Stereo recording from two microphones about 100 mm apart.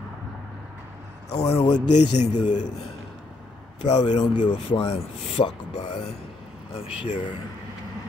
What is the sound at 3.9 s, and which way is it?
A man's voice, 45° left (ahead or behind).